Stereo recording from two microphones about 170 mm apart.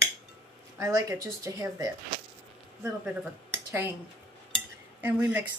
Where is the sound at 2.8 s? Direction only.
10° right (ahead or behind).